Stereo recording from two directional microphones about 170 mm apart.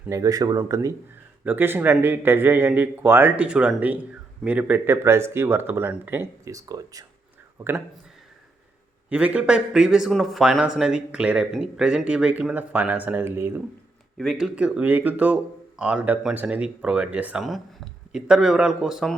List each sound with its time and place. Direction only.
0.1 s speech: 20° right (ahead or behind)
9.0 s a man's voice: 10° right (ahead or behind)
14.2 s a man's voice: centre (ahead or behind)